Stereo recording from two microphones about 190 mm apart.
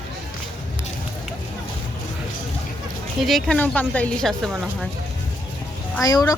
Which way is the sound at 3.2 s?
Centre (ahead or behind).